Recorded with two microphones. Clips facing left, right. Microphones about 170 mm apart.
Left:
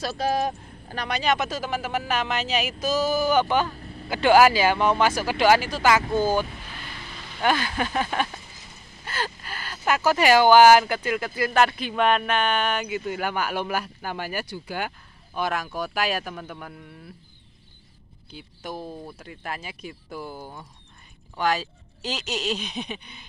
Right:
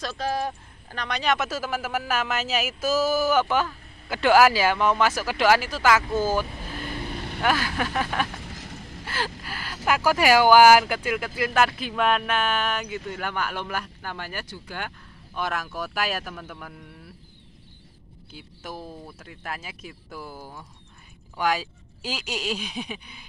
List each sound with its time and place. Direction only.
0.0 s speech: 10° left (ahead or behind)
3.6 s vehicle: 35° left (ahead or behind)
4.1 s speech: centre (ahead or behind)
7.0 s vehicle: 55° right (ahead or behind)
7.4 s speech: centre (ahead or behind)
8.4 s a sound: 85° right
9.0 s a sound: 5° right (ahead or behind)
9.4 s speech: 10° right (ahead or behind)
18.3 s speech: 5° right (ahead or behind)